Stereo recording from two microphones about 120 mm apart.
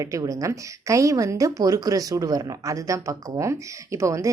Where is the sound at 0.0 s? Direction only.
25° right (ahead or behind).